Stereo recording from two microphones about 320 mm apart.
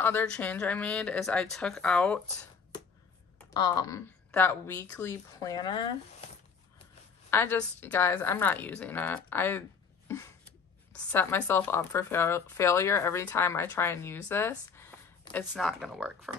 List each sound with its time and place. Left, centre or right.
0.0 s speech: centre
3.3 s speech: centre
6.2 s a sound: centre
7.2 s a woman's voice: centre